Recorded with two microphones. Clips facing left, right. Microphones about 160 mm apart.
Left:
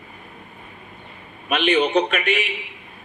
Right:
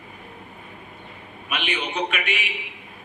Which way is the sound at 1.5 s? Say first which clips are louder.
Left 10 dB; 45° left (ahead or behind).